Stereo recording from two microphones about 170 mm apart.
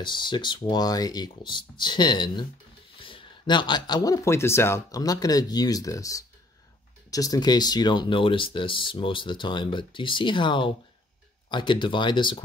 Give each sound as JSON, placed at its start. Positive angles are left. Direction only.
{"t": 0.0, "sound": "speech", "side_deg": 25}